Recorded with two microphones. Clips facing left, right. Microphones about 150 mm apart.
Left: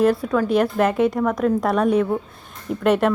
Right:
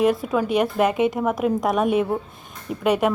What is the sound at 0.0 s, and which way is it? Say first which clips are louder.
Speech: left 2 dB; centre (ahead or behind).